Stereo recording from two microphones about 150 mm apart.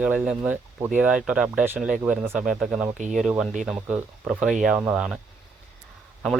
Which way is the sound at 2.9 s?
55° right (ahead or behind).